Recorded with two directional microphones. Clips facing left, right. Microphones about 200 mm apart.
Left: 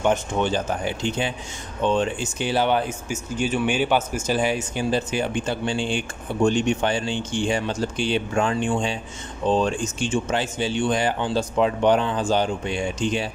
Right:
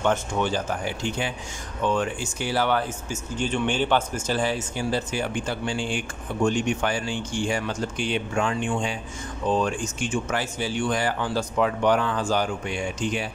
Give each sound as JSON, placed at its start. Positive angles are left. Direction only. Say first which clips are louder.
{"t": 0.0, "sound": "speech", "louder": "left 2 dB", "side_deg": 20}